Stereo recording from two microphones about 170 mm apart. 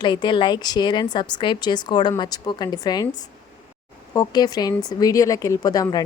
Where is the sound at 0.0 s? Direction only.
25° left (ahead or behind).